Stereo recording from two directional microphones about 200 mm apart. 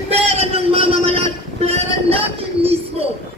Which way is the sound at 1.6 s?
30° right (ahead or behind).